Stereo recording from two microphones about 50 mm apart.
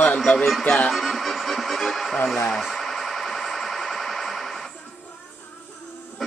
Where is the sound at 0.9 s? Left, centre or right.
Centre.